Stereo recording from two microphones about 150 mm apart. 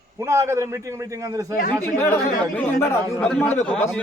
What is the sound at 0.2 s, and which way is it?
A man's voice, 20° right (ahead or behind).